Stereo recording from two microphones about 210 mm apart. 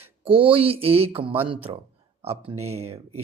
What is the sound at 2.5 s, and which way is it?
Speech, 90° right.